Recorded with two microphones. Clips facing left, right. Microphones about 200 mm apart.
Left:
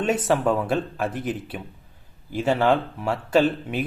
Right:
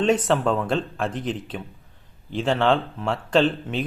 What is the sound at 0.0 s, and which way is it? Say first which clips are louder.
Speech: right 1 dB; 10° left (ahead or behind).